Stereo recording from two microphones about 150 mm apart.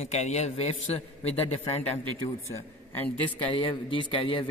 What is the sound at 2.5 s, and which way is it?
Speech, 15° left (ahead or behind).